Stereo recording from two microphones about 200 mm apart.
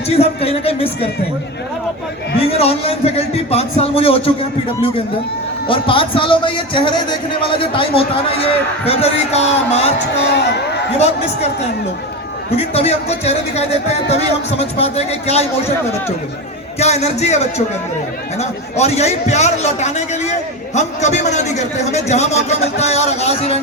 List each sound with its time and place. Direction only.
0.1 s speech: 30° left (ahead or behind)
2.4 s speech: 30° left (ahead or behind)
5.6 s speech: 25° left (ahead or behind)
10.3 s speech: 60° left (ahead or behind)
10.9 s a man's voice: 35° left (ahead or behind)
16.8 s a man's voice: 35° left (ahead or behind)